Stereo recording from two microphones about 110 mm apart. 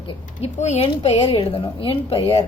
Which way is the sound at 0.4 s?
80° left.